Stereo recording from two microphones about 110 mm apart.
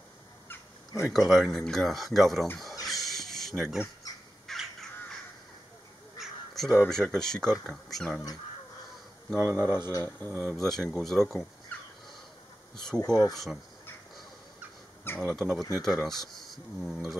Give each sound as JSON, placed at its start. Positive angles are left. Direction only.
{"t": 1.1, "sound": "speech", "side_deg": 0}
{"t": 2.8, "sound": "a sound", "side_deg": 0}
{"t": 4.5, "sound": "crow", "side_deg": 5}
{"t": 6.1, "sound": "crow", "side_deg": 0}
{"t": 6.9, "sound": "speech", "side_deg": 5}
{"t": 9.4, "sound": "speech", "side_deg": -25}
{"t": 9.7, "sound": "speech", "side_deg": 20}
{"t": 10.4, "sound": "speech", "side_deg": 0}
{"t": 11.7, "sound": "a sound", "side_deg": 15}
{"t": 12.7, "sound": "speech", "side_deg": 5}
{"t": 15.1, "sound": "speech", "side_deg": 0}